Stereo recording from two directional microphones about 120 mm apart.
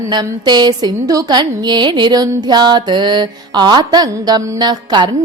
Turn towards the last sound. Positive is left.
turn(degrees=-40)  # may be behind; listen again after turning